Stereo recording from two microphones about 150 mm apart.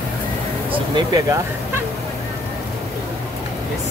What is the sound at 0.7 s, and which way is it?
Speech, 25° right (ahead or behind).